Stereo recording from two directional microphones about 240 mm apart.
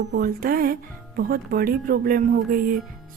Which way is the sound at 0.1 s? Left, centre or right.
Right.